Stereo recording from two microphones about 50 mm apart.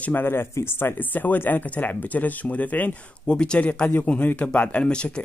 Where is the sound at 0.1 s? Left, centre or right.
Left.